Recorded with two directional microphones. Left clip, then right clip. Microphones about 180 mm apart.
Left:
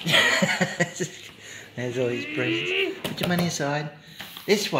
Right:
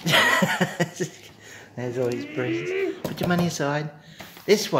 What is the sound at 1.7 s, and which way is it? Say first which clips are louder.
Speech: even; centre (ahead or behind).